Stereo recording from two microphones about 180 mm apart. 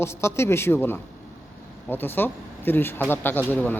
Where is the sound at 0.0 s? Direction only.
15° left (ahead or behind).